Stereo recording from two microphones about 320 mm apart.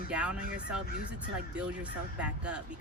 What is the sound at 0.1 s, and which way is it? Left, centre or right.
Speech, centre.